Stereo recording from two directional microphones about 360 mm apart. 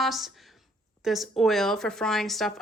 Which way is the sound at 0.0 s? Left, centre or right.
Centre.